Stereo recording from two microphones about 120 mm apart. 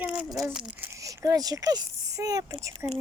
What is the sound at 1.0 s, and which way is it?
A woman's voice, 30° right (ahead or behind).